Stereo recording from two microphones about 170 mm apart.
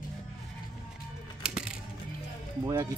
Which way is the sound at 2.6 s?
15° right (ahead or behind).